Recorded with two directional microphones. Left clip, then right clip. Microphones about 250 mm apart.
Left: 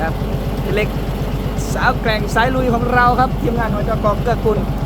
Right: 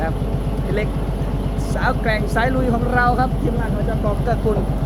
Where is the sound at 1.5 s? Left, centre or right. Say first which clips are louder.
Left 5 dB; centre.